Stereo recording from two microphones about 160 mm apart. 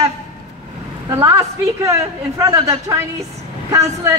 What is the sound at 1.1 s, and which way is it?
A woman's voice, 20° right (ahead or behind).